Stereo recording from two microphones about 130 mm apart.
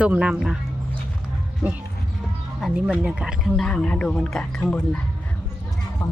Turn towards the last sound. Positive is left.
turn(degrees=10)  # may be behind; listen again after turning